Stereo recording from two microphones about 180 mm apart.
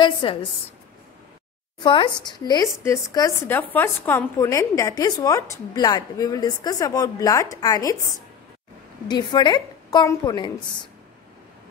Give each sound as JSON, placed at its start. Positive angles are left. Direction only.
{"t": 0.0, "sound": "a woman's voice", "side_deg": 30}
{"t": 1.8, "sound": "speech", "side_deg": 25}
{"t": 9.0, "sound": "speech", "side_deg": 25}